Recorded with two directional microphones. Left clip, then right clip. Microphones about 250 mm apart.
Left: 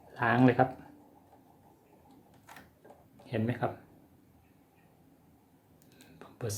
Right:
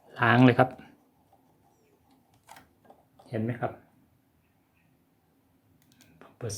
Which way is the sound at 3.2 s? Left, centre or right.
Centre.